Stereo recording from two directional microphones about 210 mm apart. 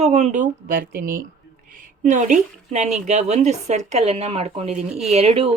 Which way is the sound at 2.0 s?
35° right (ahead or behind).